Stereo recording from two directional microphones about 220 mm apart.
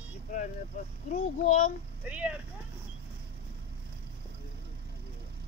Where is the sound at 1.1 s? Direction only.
30° left (ahead or behind).